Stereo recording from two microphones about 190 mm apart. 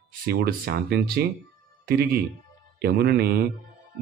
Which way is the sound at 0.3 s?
55° right (ahead or behind).